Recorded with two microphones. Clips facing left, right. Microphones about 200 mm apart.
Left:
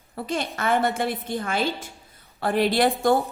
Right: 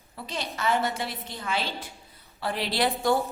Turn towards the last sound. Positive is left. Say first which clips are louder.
# left 5 dB
turn(degrees=50)  # may be behind; listen again after turning